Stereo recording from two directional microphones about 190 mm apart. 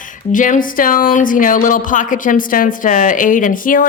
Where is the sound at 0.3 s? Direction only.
40° left (ahead or behind).